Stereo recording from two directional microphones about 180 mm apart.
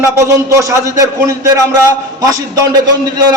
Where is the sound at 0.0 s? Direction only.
15° right (ahead or behind).